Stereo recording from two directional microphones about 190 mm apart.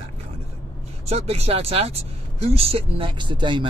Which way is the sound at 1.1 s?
35° right (ahead or behind).